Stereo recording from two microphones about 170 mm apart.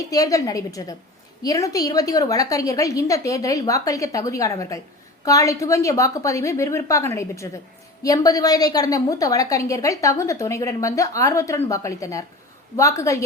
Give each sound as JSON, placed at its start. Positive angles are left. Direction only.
{"t": 0.0, "sound": "a woman's voice", "side_deg": 20}